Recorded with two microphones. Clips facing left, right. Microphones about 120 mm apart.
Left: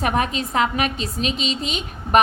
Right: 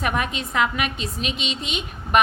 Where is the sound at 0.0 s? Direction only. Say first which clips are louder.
Left 3 dB; 35° left (ahead or behind).